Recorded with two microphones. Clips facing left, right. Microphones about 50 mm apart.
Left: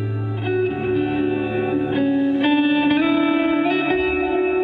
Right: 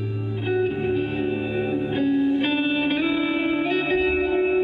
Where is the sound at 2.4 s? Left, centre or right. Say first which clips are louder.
Left 5 dB; centre.